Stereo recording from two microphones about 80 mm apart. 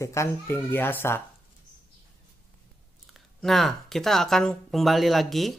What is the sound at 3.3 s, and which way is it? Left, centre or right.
Speech, centre.